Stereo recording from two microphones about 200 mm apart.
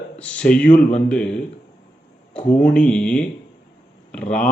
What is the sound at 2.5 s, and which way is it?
Speech, 40° left (ahead or behind).